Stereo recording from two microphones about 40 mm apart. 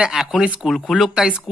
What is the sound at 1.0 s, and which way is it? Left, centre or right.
Speech, centre.